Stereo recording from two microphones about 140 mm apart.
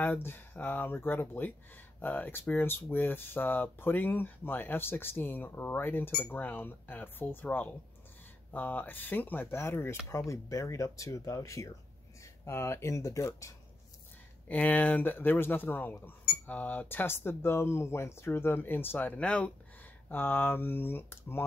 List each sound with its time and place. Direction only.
0.0 s speech: 15° left (ahead or behind)